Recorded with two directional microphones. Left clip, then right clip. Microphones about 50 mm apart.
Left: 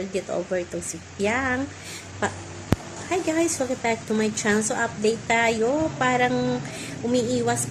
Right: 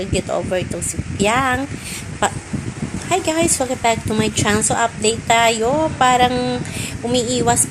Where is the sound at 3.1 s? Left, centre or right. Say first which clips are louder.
Right 6 dB; left.